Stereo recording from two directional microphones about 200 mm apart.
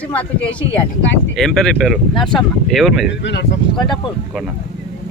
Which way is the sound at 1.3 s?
Centre (ahead or behind).